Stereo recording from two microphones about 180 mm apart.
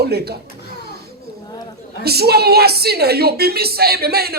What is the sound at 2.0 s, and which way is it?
A woman's voice, 60° right (ahead or behind).